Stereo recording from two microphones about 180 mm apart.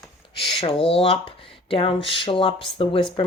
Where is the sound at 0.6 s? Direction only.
30° left (ahead or behind).